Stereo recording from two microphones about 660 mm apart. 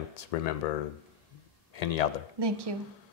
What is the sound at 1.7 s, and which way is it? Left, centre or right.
Speech, left.